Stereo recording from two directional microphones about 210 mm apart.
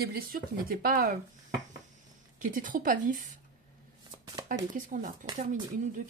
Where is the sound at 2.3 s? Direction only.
40° right (ahead or behind).